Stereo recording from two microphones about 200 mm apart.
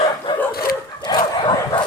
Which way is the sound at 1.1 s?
20° left (ahead or behind).